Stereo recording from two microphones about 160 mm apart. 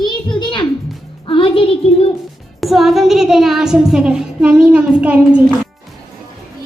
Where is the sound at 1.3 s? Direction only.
35° left (ahead or behind).